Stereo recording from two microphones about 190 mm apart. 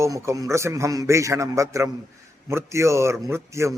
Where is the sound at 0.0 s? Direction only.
15° right (ahead or behind).